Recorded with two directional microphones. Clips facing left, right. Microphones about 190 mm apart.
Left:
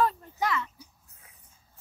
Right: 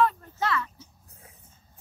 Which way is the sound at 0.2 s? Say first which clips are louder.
Right 1 dB; 15° left (ahead or behind).